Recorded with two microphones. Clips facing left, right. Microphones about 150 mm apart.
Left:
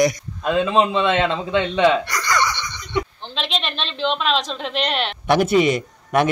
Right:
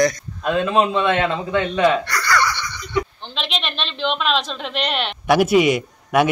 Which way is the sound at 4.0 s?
5° right (ahead or behind).